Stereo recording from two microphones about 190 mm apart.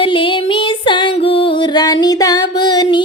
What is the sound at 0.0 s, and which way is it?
Music, 25° left (ahead or behind).